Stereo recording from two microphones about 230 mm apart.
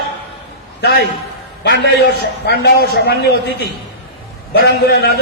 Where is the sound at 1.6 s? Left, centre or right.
Left.